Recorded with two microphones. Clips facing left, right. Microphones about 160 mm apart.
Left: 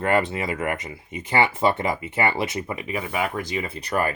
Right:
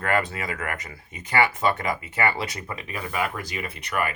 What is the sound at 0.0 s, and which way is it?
Speech, 25° left (ahead or behind).